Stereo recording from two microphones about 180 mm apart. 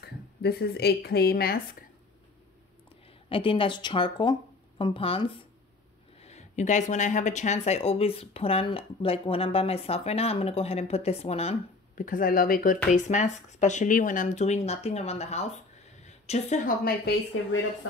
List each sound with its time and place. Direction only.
0.0 s speech: 65° left (ahead or behind)
3.3 s speech: 30° left (ahead or behind); by 12.7 s 50° left (ahead or behind)
12.9 s a woman's voice: 40° left (ahead or behind)